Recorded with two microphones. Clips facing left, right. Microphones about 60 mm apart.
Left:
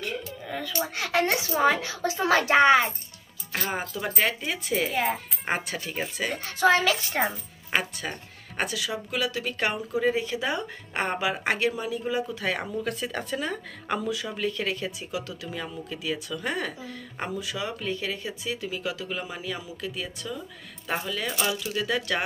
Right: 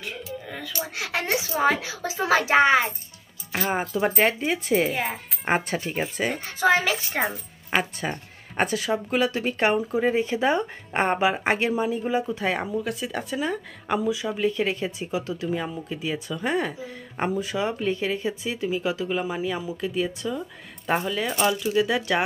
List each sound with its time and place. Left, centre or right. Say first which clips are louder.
0.5 s speech: left 6 dB; centre
1.7 s a child's voice: even; centre
3.9 s speech: right 8 dB; right
4.9 s speech: left 2 dB; centre
5.5 s speech: right 5 dB; right
6.3 s speech: even; centre
7.2 s a woman's voice: right 1 dB; centre
8.5 s speech: right 6 dB; right; by 22.2 s centre